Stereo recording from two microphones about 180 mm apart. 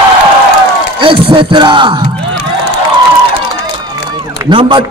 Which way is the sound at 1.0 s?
30° right (ahead or behind).